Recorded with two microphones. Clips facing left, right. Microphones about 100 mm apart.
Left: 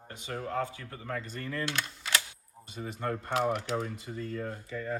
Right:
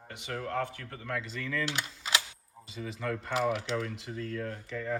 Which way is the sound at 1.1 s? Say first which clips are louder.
Right 1 dB; 90° right.